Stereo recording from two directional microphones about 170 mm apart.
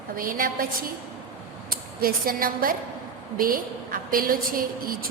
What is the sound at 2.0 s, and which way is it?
A woman's voice, 60° right (ahead or behind).